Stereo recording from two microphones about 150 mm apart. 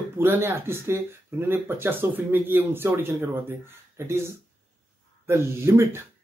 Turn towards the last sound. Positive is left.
turn(degrees=-15)  # may be behind; listen again after turning